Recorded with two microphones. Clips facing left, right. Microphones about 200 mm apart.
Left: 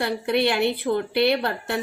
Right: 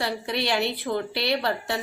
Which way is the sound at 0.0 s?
55° left (ahead or behind).